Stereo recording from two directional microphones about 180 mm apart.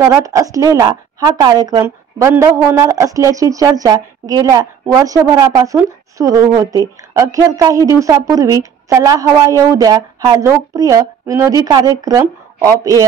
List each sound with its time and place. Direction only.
0.0 s a woman's voice: 15° right (ahead or behind)